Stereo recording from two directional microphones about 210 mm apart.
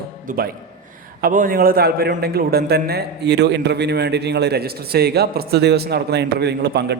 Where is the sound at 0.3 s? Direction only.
40° right (ahead or behind).